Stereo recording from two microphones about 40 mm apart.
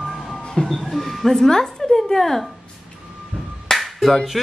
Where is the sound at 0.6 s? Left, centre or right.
Centre.